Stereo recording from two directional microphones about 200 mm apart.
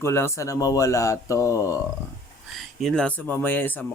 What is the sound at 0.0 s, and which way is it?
Speech, 15° left (ahead or behind).